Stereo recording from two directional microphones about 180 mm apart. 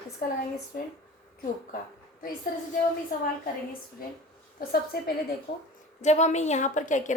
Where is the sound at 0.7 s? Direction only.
55° left (ahead or behind).